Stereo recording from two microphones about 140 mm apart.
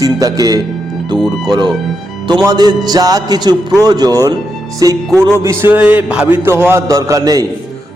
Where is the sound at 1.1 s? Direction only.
30° right (ahead or behind).